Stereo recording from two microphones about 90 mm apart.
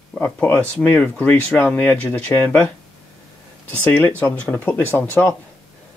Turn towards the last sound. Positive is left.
turn(degrees=20)  # may be behind; listen again after turning